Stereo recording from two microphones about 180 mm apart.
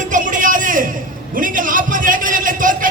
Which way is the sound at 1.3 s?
50° right (ahead or behind).